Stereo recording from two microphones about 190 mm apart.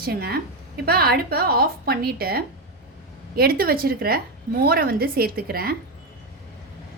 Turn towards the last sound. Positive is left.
turn(degrees=-50)  # may be behind; listen again after turning